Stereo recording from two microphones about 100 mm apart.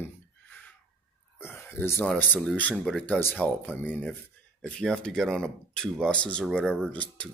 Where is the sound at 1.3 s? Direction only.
20° left (ahead or behind).